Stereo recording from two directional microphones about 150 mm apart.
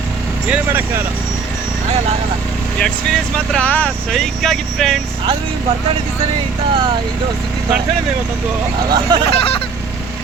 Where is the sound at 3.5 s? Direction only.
10° left (ahead or behind).